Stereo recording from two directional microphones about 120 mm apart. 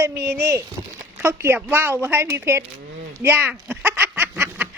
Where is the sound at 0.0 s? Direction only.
25° right (ahead or behind).